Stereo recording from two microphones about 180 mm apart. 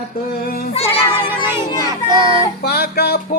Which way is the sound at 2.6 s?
60° left (ahead or behind).